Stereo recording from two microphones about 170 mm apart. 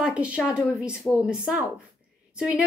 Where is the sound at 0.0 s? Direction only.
5° right (ahead or behind).